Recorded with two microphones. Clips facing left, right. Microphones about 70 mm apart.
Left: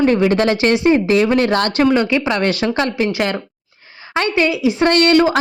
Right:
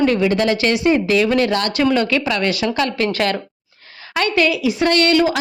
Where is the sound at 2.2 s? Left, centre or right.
Left.